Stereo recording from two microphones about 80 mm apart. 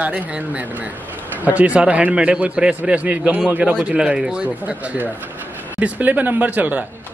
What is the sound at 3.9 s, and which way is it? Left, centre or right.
A man's voice, centre.